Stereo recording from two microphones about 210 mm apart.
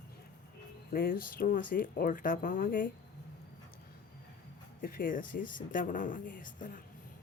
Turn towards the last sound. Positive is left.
turn(degrees=40)  # may be behind; listen again after turning